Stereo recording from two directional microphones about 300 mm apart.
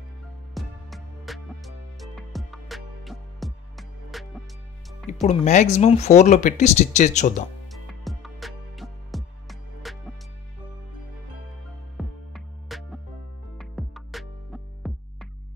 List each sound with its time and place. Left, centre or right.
0.6 s music: centre
5.1 s speech: left
7.7 s music: centre
12.0 s music: centre